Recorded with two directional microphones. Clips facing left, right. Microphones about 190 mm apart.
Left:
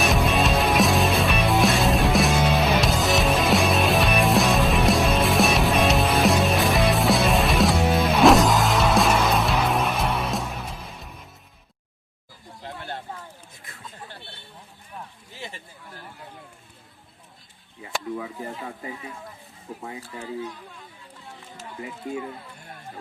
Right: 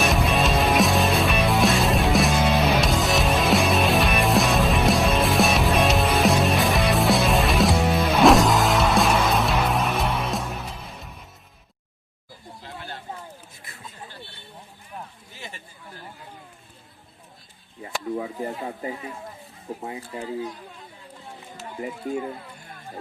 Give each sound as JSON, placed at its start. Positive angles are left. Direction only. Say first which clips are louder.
{"t": 0.0, "sound": "music", "louder": "even", "side_deg": 0}
{"t": 18.2, "sound": "snake", "louder": "right 4 dB", "side_deg": -30}
{"t": 19.8, "sound": "a sound", "louder": "right 1 dB", "side_deg": -20}
{"t": 20.1, "sound": "speech", "louder": "right 2 dB", "side_deg": -35}